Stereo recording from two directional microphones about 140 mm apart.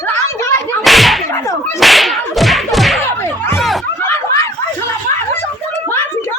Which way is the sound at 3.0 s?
15° left (ahead or behind).